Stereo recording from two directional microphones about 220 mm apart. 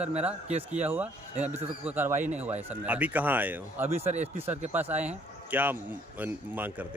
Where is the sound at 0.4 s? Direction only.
30° right (ahead or behind).